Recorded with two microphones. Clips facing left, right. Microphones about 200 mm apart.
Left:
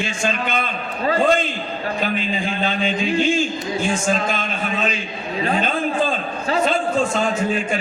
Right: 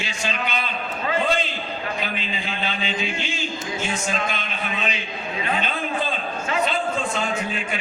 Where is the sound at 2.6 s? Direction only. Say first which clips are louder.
Left 6 dB; 50° left (ahead or behind).